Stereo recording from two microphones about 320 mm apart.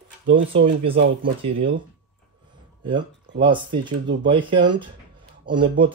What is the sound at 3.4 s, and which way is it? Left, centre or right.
Speech, centre.